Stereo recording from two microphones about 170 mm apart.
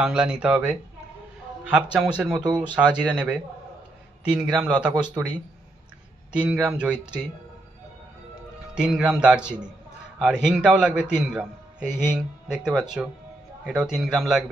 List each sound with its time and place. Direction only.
0.0 s a man's voice: 5° right (ahead or behind)
1.8 s speech: 5° right (ahead or behind)
2.3 s speech: 25° right (ahead or behind)
2.7 s a man's voice: 5° right (ahead or behind)
6.3 s speech: 5° right (ahead or behind)
8.7 s a man's voice: 5° right (ahead or behind)